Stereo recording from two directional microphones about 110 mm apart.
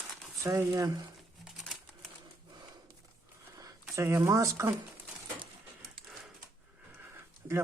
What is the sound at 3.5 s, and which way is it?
Speech, 30° right (ahead or behind).